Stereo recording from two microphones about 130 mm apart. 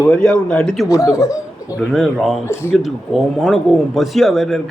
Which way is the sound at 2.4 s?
20° left (ahead or behind).